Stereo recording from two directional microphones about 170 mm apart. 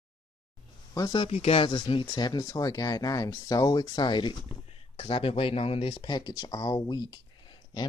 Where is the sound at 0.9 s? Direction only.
25° left (ahead or behind).